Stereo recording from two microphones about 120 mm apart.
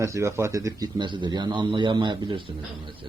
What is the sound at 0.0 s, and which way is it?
A man's voice, 25° right (ahead or behind).